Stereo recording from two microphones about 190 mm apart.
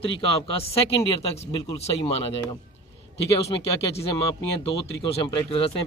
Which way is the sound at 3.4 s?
30° left (ahead or behind).